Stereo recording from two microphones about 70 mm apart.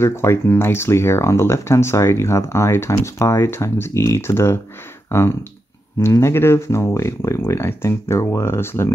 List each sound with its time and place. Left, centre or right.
0.0 s speech: left